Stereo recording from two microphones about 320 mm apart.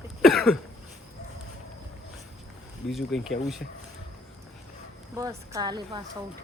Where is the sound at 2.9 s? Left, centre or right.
Centre.